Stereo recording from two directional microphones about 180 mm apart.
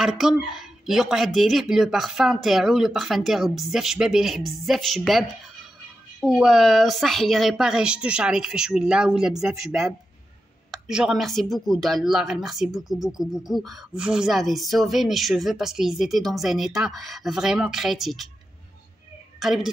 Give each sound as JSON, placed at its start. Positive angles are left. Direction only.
{"t": 0.0, "sound": "speech", "side_deg": 0}
{"t": 6.2, "sound": "speech", "side_deg": 0}
{"t": 19.4, "sound": "speech", "side_deg": 0}